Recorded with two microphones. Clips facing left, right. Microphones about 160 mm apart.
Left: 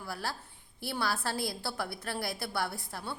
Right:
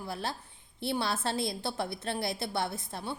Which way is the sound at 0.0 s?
20° right (ahead or behind).